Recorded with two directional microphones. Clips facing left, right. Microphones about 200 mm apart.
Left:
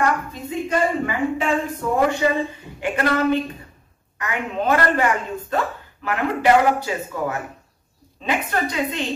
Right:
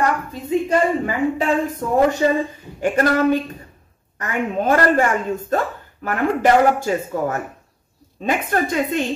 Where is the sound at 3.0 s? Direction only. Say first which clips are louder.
Right 4 dB; 45° right (ahead or behind).